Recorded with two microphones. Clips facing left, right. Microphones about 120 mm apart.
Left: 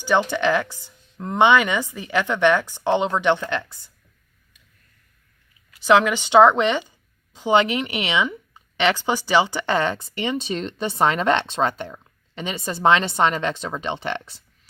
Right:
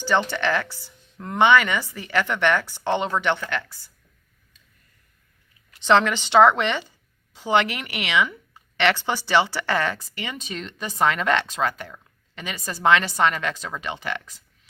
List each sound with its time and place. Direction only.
0.0 s speech: 15° left (ahead or behind)
5.8 s a woman's voice: 10° left (ahead or behind); by 14.4 s 30° left (ahead or behind)